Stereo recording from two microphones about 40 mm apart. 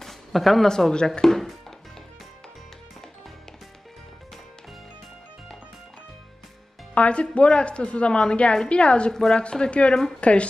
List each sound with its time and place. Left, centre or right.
0.0 s a sound: centre
0.7 s speech: centre
6.9 s speech: left
9.1 s speech: centre
9.4 s speech: left